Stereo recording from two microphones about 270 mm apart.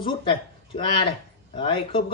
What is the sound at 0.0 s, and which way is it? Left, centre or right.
Speech, centre.